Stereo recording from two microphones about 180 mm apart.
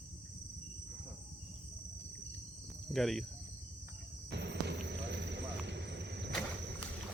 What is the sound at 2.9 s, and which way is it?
Speech, centre (ahead or behind).